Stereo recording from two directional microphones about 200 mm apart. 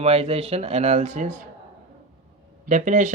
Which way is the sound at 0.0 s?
30° right (ahead or behind).